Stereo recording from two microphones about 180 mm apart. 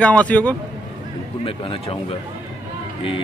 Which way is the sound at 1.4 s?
30° left (ahead or behind).